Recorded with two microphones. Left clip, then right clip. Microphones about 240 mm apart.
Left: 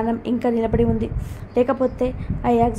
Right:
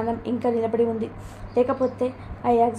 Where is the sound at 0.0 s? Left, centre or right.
Left.